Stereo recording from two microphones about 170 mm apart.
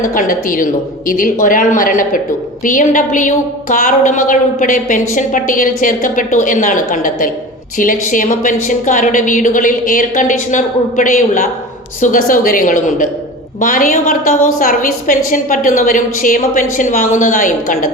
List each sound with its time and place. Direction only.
0.0 s a woman's voice: 50° left (ahead or behind)